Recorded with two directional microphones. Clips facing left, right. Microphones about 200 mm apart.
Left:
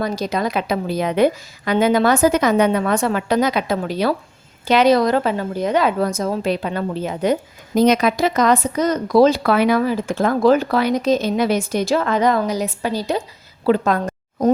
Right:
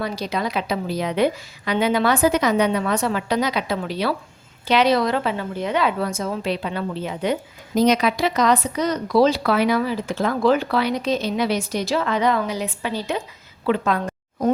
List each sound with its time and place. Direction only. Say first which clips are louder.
0.0 s a woman's voice: left 4 dB; 45° left (ahead or behind)